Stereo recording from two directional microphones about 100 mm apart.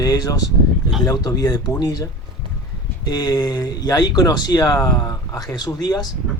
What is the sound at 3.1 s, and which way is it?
Speech, 40° left (ahead or behind).